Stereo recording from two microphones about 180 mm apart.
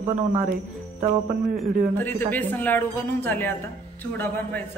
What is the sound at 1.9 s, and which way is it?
Speech, 10° left (ahead or behind).